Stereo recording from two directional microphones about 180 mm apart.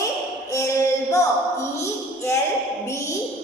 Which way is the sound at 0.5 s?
15° left (ahead or behind).